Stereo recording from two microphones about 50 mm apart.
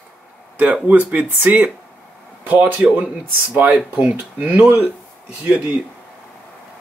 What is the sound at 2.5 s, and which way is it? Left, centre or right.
Speech, right.